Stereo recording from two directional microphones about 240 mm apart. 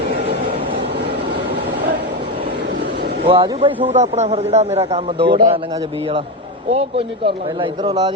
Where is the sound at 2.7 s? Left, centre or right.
Right.